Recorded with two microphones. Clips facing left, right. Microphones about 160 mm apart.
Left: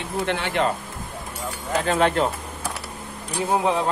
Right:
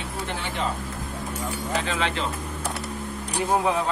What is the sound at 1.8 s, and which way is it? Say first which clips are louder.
Speech: left 7 dB; 50° left (ahead or behind).